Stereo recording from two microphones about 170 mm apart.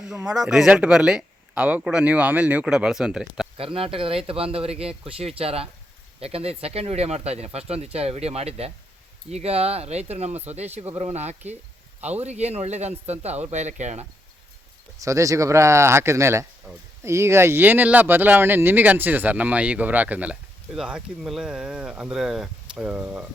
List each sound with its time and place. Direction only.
0.0 s speech: 5° right (ahead or behind)
3.6 s speech: 35° right (ahead or behind)
14.9 s speech: 20° right (ahead or behind)